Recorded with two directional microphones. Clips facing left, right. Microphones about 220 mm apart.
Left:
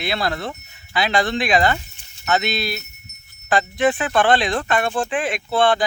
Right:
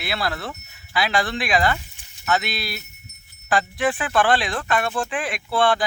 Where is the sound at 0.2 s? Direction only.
25° left (ahead or behind).